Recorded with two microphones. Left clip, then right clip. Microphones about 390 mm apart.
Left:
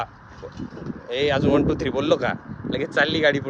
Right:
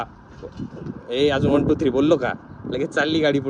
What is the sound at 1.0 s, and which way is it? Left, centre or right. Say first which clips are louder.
Speech: right 2 dB; centre.